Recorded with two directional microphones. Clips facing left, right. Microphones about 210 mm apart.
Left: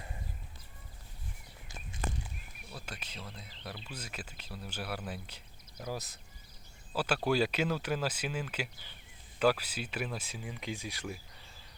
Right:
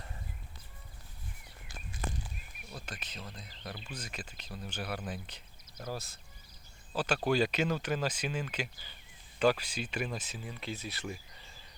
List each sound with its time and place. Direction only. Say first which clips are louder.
2.7 s speech: right 1 dB; 10° left (ahead or behind)